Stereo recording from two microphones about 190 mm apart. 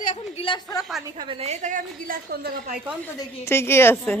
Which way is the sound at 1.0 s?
25° right (ahead or behind).